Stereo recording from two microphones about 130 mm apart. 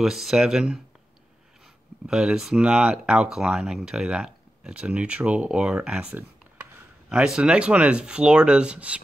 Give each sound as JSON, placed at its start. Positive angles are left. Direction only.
{"t": 0.0, "sound": "speech", "side_deg": -5}
{"t": 2.0, "sound": "speech", "side_deg": -5}
{"t": 6.1, "sound": "a sound", "side_deg": -15}
{"t": 7.1, "sound": "speech", "side_deg": -5}